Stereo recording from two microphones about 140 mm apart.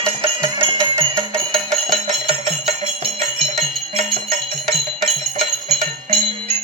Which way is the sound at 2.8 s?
45° right (ahead or behind).